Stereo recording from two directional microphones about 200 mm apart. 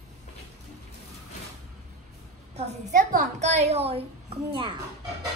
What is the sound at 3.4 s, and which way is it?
A child's voice, 35° right (ahead or behind).